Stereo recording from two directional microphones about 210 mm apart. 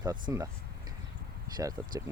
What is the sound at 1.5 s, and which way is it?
Speech, 15° right (ahead or behind).